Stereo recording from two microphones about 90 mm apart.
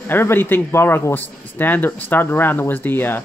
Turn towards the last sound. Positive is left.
turn(degrees=20)  # may be behind; listen again after turning